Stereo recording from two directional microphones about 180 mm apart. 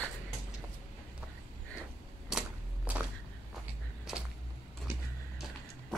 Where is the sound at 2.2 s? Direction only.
5° right (ahead or behind).